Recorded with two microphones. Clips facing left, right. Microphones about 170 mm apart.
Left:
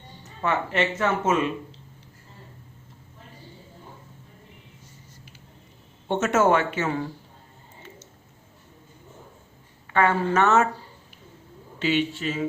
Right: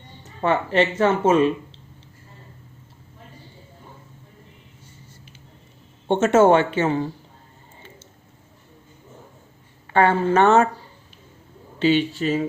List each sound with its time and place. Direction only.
0.4 s speech: 35° right (ahead or behind)
6.1 s speech: 30° right (ahead or behind)
9.9 s speech: 30° right (ahead or behind)
11.8 s speech: 35° right (ahead or behind)